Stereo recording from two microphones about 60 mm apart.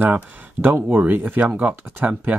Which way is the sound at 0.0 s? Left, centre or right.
Right.